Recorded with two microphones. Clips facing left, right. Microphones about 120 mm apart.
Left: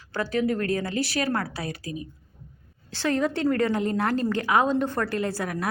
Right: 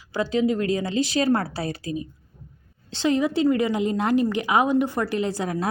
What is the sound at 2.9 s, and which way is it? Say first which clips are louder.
A woman's voice: right 3 dB; 20° right (ahead or behind).